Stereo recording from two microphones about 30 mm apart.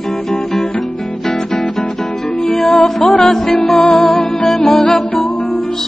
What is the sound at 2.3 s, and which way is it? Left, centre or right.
Music, left.